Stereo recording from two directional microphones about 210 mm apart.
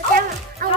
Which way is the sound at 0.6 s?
45° right (ahead or behind).